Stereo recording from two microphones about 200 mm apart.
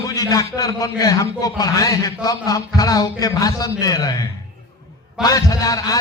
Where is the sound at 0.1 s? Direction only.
15° left (ahead or behind).